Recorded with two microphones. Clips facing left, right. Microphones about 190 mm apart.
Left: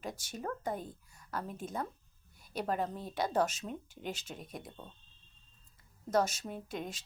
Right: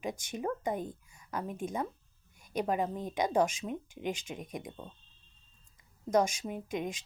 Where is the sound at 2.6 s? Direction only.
10° right (ahead or behind).